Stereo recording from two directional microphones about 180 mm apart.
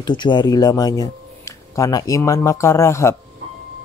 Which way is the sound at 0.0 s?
25° left (ahead or behind).